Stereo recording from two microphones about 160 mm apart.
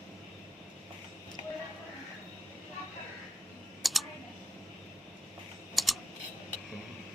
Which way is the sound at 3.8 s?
Centre (ahead or behind).